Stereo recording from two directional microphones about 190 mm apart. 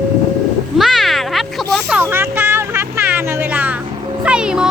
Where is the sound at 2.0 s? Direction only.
10° right (ahead or behind).